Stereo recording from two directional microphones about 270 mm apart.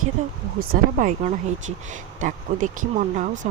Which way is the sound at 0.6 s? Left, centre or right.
Right.